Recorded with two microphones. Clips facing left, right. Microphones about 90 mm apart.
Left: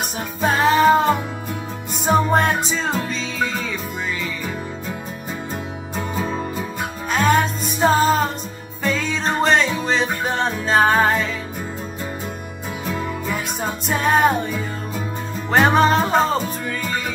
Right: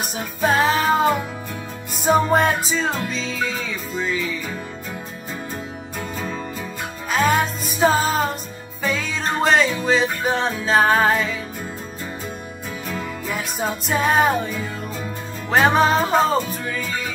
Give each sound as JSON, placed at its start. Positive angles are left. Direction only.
{"t": 0.4, "sound": "music", "side_deg": 0}
{"t": 2.3, "sound": "music", "side_deg": 0}
{"t": 5.9, "sound": "music", "side_deg": 20}
{"t": 7.1, "sound": "music", "side_deg": 0}
{"t": 13.3, "sound": "music", "side_deg": 0}